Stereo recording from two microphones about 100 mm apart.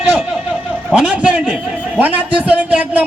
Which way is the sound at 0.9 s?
10° right (ahead or behind).